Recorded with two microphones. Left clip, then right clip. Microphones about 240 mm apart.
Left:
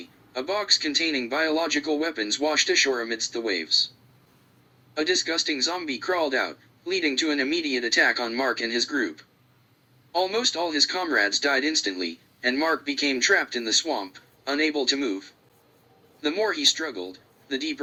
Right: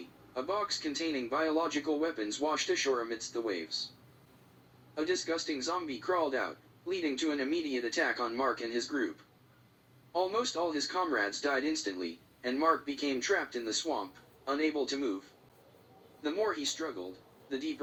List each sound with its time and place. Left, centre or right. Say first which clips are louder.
0.3 s a man's voice: left 10 dB; left
4.9 s a man's voice: left 9 dB; left
10.1 s a man's voice: left 8 dB; left